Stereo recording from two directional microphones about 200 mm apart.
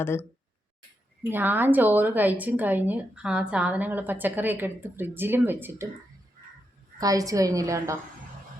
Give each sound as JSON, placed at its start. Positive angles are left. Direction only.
{"t": 0.0, "sound": "speech", "side_deg": 10}
{"t": 1.3, "sound": "a woman's voice", "side_deg": -10}
{"t": 7.0, "sound": "a woman's voice", "side_deg": -15}